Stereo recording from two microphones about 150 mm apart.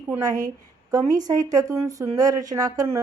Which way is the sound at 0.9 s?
20° right (ahead or behind).